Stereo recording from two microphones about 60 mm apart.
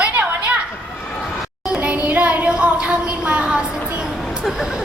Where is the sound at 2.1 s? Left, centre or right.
Right.